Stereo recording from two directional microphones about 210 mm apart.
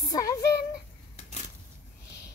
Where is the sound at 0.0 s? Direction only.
15° left (ahead or behind).